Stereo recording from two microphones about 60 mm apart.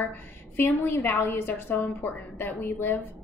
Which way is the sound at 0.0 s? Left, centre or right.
Left.